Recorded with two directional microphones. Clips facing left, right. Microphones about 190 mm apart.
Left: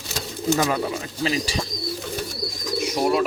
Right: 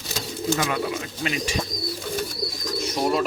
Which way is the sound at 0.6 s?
35° left (ahead or behind).